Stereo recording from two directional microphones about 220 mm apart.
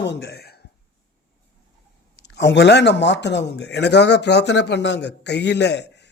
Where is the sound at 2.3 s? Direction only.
50° left (ahead or behind).